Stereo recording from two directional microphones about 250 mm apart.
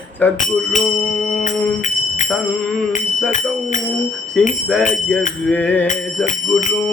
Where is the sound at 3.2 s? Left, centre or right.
Left.